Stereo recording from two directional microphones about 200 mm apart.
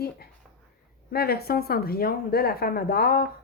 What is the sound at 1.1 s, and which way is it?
A woman's voice, 50° left (ahead or behind).